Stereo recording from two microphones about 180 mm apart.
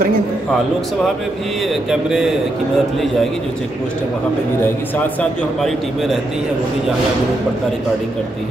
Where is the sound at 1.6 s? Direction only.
Centre (ahead or behind).